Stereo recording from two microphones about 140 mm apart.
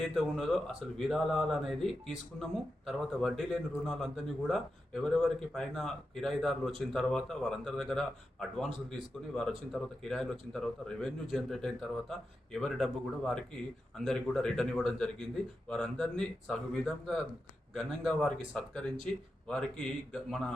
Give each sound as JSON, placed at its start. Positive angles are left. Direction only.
{"t": 0.0, "sound": "speech", "side_deg": 0}